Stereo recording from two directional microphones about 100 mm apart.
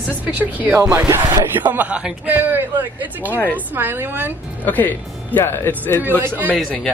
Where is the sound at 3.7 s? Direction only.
20° right (ahead or behind).